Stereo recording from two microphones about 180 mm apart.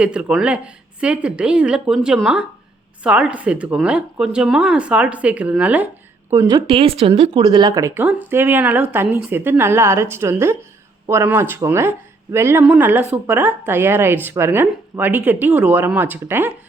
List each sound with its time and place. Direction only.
0.0 s speech: 5° right (ahead or behind)
6.7 s speech: 30° right (ahead or behind); by 16.5 s 10° right (ahead or behind)